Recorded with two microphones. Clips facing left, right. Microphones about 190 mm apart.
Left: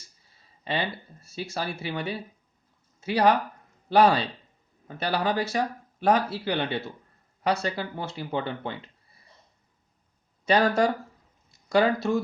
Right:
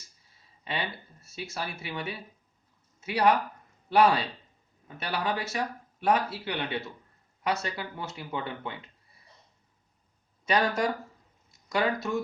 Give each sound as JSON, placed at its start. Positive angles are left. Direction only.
{"t": 0.6, "sound": "speech", "side_deg": 35}
{"t": 10.4, "sound": "speech", "side_deg": 30}